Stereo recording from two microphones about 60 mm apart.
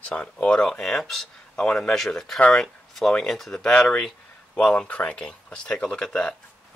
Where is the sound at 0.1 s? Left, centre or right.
Centre.